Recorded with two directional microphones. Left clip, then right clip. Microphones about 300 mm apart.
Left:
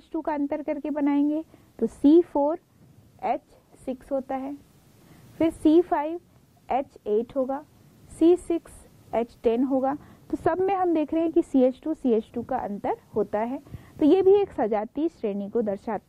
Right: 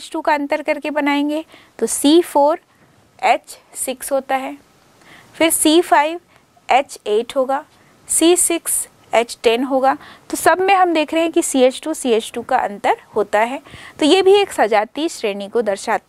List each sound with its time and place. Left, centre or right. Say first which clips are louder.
0.0 s a woman's voice: right 10 dB; centre
2.3 s a woman's voice: right 11 dB; centre
3.2 s a woman's voice: right 12 dB; centre